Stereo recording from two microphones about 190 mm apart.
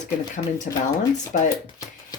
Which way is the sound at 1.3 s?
45° left (ahead or behind).